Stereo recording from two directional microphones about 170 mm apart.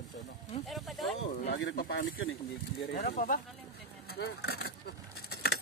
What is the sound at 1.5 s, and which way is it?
Speech, 65° left (ahead or behind).